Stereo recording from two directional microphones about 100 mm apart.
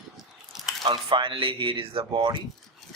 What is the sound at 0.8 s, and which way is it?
Speech, 55° right (ahead or behind).